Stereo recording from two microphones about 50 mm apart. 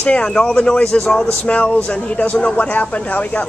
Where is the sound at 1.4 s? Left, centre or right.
Left.